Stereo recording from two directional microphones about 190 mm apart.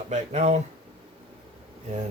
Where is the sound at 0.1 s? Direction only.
35° right (ahead or behind).